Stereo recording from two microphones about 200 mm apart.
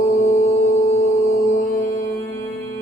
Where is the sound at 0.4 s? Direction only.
15° left (ahead or behind).